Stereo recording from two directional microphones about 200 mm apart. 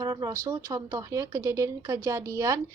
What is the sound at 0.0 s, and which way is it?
A woman's voice, 20° right (ahead or behind).